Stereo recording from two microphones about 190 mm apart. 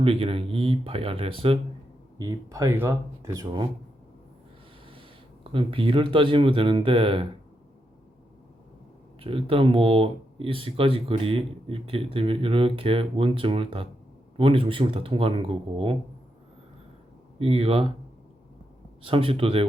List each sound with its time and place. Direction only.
0.0 s speech: 30° right (ahead or behind)
2.1 s speech: 20° right (ahead or behind)
4.9 s speech: 30° right (ahead or behind)
9.2 s speech: 30° right (ahead or behind)
17.4 s speech: 30° right (ahead or behind)
19.0 s speech: 30° right (ahead or behind)